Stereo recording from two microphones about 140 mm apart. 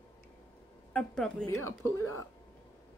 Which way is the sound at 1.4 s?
20° left (ahead or behind).